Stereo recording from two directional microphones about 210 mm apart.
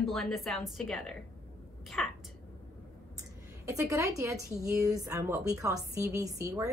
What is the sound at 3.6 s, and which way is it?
A woman's voice, 15° right (ahead or behind).